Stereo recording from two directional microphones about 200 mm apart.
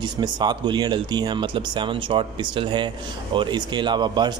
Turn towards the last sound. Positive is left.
turn(degrees=-20)  # may be behind; listen again after turning